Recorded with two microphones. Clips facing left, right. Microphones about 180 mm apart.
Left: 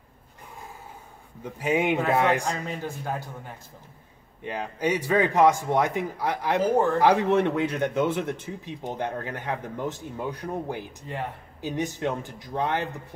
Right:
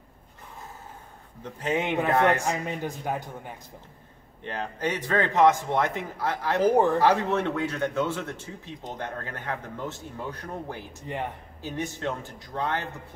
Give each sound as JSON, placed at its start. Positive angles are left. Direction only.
{"t": 1.4, "sound": "a man's voice", "side_deg": 10}
{"t": 2.4, "sound": "a man's voice", "side_deg": -15}
{"t": 4.4, "sound": "a man's voice", "side_deg": 10}